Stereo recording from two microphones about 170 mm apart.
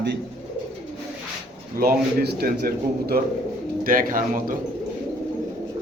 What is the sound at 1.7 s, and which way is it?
A man's voice, 65° right (ahead or behind).